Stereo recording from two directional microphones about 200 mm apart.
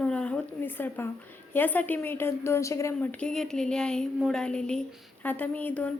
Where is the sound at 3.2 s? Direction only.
5° left (ahead or behind).